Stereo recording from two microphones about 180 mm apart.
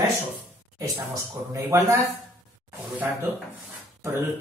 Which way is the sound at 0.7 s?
20° right (ahead or behind).